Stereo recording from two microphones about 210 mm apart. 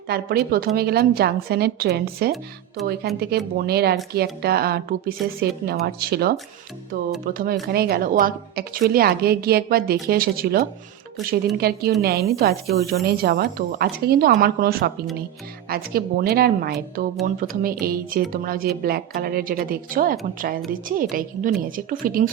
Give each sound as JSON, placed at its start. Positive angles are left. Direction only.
{"t": 0.1, "sound": "a woman's voice", "side_deg": -45}